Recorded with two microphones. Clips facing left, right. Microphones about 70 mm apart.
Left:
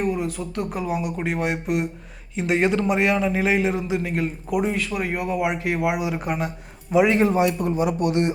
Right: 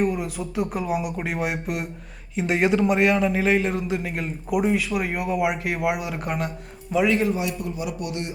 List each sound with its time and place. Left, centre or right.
0.0 s a man's voice: centre
6.9 s a man's voice: centre
7.2 s a man's voice: left